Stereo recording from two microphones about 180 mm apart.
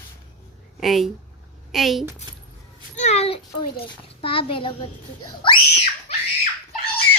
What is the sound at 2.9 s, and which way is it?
A child's voice, 40° left (ahead or behind).